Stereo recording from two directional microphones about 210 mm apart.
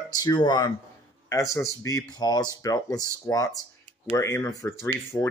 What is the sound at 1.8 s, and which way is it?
Speech, 15° left (ahead or behind).